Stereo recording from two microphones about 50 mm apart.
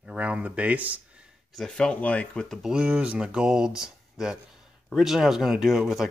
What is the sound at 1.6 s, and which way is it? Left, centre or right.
Speech, centre.